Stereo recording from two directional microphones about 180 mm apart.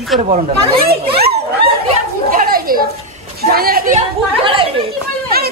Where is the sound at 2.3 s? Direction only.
55° right (ahead or behind).